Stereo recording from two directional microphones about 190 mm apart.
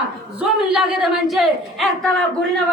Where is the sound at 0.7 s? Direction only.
Centre (ahead or behind).